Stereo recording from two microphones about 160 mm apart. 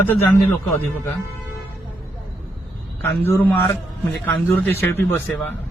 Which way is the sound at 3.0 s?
15° left (ahead or behind).